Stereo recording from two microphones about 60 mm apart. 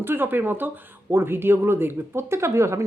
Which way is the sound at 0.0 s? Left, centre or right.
Right.